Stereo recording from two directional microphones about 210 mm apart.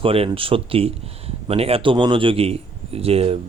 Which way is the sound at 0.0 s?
25° right (ahead or behind).